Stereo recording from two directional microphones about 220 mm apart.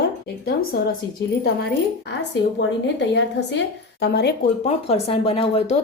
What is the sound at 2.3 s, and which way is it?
Speech, 55° left (ahead or behind).